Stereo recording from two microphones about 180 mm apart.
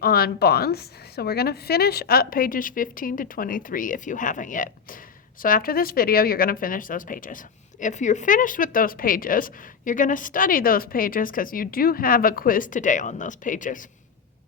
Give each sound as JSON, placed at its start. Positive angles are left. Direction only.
{"t": 0.0, "sound": "speech", "side_deg": 60}